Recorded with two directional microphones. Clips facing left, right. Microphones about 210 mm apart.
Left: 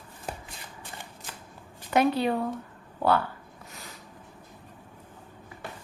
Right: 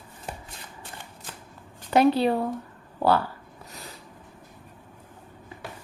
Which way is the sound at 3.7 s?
35° right (ahead or behind).